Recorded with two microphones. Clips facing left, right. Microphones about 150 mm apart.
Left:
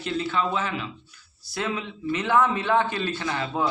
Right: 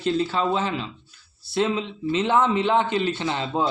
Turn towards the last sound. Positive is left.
turn(degrees=-25)  # may be behind; listen again after turning